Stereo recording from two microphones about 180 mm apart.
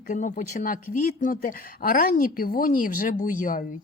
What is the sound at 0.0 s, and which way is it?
A woman's voice, 45° left (ahead or behind).